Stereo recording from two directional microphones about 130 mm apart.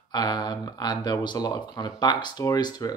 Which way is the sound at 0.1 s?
35° left (ahead or behind).